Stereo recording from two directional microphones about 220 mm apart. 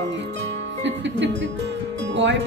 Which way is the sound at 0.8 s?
55° right (ahead or behind).